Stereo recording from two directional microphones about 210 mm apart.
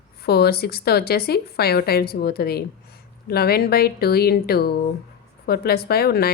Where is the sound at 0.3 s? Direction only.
50° left (ahead or behind).